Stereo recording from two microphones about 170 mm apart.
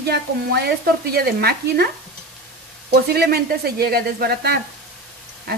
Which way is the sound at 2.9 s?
70° right (ahead or behind).